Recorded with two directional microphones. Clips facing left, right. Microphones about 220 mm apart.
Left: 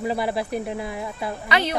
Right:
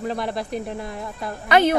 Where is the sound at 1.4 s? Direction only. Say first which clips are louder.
Right 8 dB; 50° right (ahead or behind).